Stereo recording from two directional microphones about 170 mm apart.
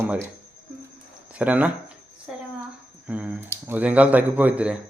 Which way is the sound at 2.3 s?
5° right (ahead or behind).